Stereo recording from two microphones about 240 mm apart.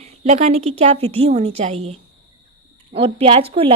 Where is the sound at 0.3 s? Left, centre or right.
Right.